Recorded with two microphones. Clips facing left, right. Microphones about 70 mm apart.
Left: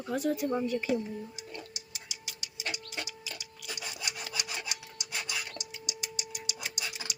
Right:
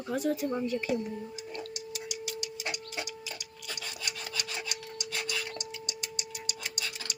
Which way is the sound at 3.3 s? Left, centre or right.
Centre.